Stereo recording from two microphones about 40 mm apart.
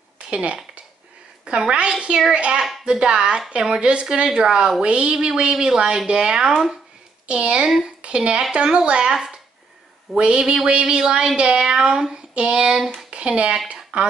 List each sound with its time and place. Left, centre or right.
0.3 s speech: right
1.6 s speech: right
7.2 s a woman's voice: right